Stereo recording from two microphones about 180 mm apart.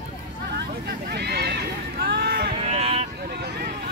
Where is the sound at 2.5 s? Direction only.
35° right (ahead or behind).